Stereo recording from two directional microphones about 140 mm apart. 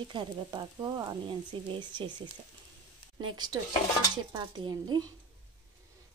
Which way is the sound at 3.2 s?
30° right (ahead or behind).